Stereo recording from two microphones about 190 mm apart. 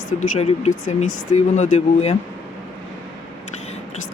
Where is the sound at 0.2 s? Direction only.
35° left (ahead or behind).